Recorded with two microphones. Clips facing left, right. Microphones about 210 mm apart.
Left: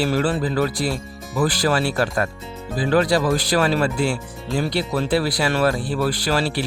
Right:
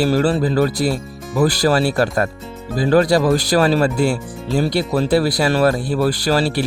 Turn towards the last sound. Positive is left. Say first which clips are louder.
# right 4 dB
turn(degrees=-40)  # may be behind; listen again after turning